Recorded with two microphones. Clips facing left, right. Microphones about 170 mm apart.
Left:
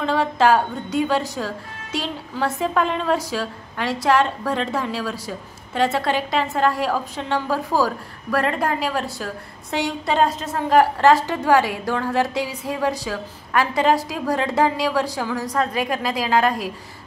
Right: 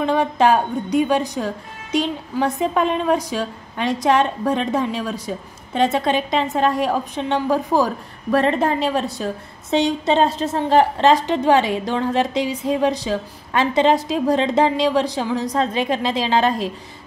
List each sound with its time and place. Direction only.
0.0 s speech: 20° right (ahead or behind)